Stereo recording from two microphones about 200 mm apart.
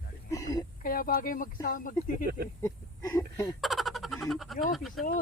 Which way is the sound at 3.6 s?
Centre (ahead or behind).